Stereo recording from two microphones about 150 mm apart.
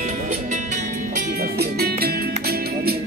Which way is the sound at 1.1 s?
85° right.